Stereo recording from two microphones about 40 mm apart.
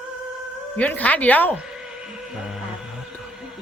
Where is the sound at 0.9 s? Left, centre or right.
Left.